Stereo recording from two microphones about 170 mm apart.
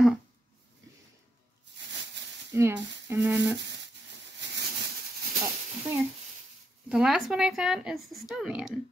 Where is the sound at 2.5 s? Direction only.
15° right (ahead or behind).